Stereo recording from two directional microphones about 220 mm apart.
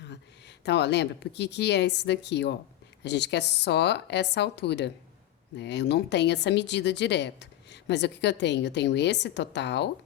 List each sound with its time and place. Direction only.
0.1 s a woman's voice: 50° left (ahead or behind)